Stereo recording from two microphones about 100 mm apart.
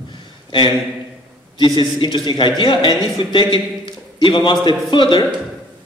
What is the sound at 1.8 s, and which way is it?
A man's voice, 55° left (ahead or behind).